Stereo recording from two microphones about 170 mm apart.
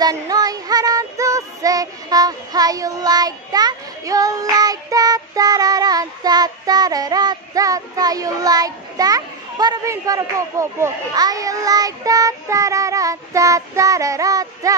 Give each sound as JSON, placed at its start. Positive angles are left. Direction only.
{"t": 0.0, "sound": "music", "side_deg": -20}